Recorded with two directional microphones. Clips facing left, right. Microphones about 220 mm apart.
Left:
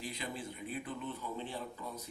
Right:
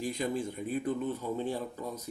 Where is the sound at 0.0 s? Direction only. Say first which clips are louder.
Right 10 dB; 45° right (ahead or behind).